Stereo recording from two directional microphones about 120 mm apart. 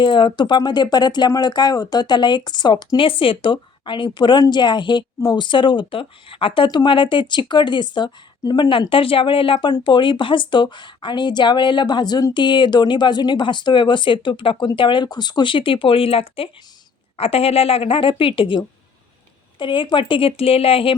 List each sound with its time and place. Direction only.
0.0 s a woman's voice: 40° left (ahead or behind)